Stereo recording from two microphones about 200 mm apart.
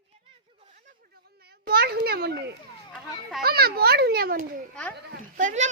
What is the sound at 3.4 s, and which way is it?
A child's voice, 50° right (ahead or behind).